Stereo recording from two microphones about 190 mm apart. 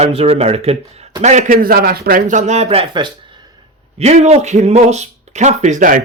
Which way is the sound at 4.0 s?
35° right (ahead or behind).